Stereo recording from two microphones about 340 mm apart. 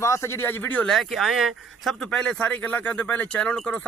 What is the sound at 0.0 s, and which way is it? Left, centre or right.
A man's voice, centre.